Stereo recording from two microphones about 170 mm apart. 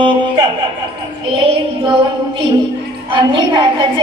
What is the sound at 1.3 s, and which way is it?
Speech, 30° right (ahead or behind).